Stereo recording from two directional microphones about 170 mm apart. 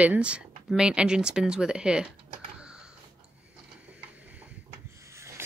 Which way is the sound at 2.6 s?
5° right (ahead or behind).